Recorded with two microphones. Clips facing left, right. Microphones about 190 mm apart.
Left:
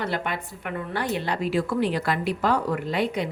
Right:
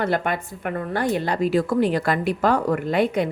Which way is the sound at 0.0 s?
50° right (ahead or behind).